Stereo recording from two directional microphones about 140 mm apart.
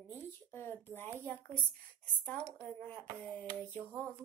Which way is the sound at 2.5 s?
10° left (ahead or behind).